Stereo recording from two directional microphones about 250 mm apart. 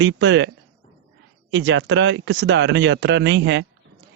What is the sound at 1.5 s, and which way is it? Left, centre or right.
Speech, right.